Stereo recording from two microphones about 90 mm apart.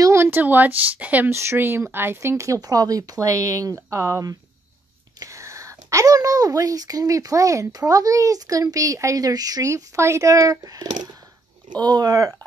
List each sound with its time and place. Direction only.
0.0 s speech: 30° right (ahead or behind)